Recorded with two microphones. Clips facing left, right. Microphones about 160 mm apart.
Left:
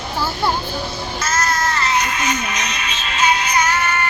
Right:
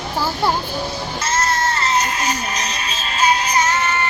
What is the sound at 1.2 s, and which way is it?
Child singing, 30° right (ahead or behind).